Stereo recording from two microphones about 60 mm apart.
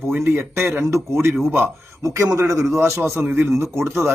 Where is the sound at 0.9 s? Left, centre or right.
Right.